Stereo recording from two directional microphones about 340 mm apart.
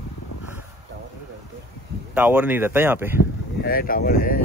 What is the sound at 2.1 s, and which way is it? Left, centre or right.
A man's voice, centre.